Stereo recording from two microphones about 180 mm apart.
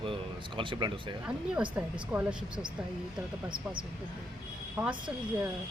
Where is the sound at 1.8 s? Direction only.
10° right (ahead or behind).